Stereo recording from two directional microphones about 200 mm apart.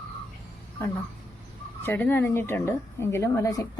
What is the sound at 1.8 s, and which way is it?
Speech, 10° left (ahead or behind).